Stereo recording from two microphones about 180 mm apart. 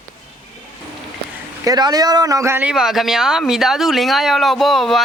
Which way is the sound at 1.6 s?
20° right (ahead or behind).